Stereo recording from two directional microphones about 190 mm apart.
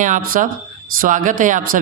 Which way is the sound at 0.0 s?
45° right (ahead or behind).